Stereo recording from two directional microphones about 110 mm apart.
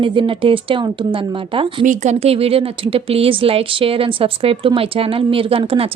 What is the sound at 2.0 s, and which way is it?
Speech, 80° right.